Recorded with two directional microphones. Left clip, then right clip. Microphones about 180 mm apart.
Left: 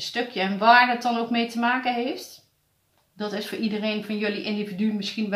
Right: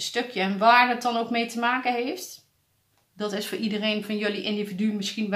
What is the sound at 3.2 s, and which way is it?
Speech, 40° right (ahead or behind).